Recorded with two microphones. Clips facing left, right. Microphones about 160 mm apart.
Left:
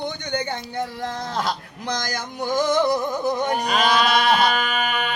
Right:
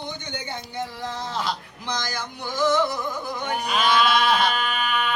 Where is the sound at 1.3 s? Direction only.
45° left (ahead or behind).